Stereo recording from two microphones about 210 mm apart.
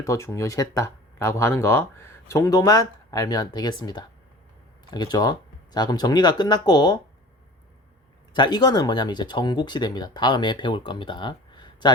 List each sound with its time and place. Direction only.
0.0 s speech: 15° left (ahead or behind)
8.3 s speech: 20° left (ahead or behind)